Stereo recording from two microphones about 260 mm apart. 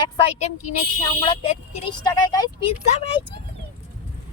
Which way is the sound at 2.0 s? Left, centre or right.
Centre.